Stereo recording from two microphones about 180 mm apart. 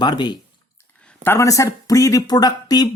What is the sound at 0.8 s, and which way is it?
Speech, 10° left (ahead or behind).